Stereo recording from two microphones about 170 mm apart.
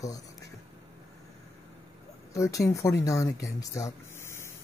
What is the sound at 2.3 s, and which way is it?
Speech, 20° left (ahead or behind).